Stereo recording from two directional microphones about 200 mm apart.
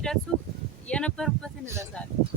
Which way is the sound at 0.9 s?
5° left (ahead or behind).